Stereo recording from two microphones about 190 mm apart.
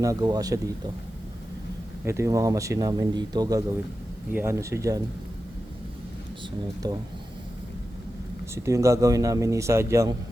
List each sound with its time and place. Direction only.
0.0 s speech: 20° right (ahead or behind)
2.0 s speech: 15° right (ahead or behind)
6.8 s speech: 20° right (ahead or behind)
8.5 s speech: 15° right (ahead or behind)